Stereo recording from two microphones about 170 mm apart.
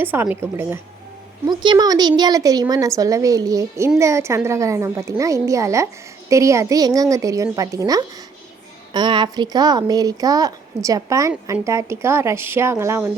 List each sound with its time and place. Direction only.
0.0 s a woman's voice: 15° right (ahead or behind)
1.5 s a woman's voice: 25° right (ahead or behind)